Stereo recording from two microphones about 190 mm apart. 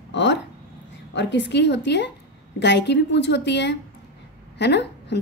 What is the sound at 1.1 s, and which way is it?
A woman's voice, 70° left (ahead or behind).